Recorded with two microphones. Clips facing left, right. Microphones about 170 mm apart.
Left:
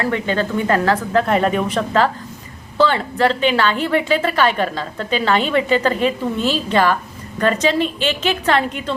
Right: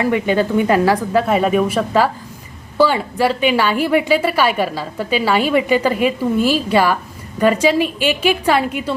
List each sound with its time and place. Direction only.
0.0 s a woman's voice: 15° right (ahead or behind)